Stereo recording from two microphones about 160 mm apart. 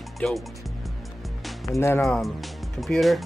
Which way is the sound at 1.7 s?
15° left (ahead or behind).